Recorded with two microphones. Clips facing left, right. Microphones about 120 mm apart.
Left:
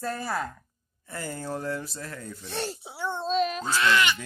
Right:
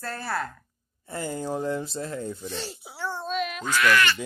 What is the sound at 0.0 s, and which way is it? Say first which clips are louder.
Speech: left 1 dB; 15° left (ahead or behind).